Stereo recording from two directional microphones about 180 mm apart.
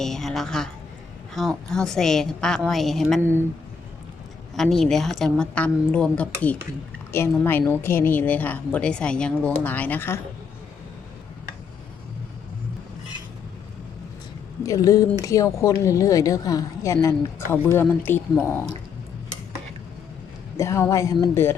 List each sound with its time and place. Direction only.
0.0 s a woman's voice: centre (ahead or behind)
3.2 s speech: 15° right (ahead or behind)
4.5 s a woman's voice: centre (ahead or behind)
14.6 s speech: 20° left (ahead or behind)
20.6 s speech: 15° left (ahead or behind)